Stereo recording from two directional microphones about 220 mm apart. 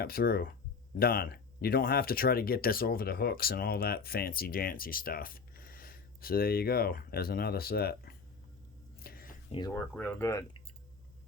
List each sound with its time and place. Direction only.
0.0 s speech: 45° left (ahead or behind)
9.0 s a sound: 40° left (ahead or behind)
9.5 s speech: 20° left (ahead or behind)
9.7 s speech: 10° left (ahead or behind)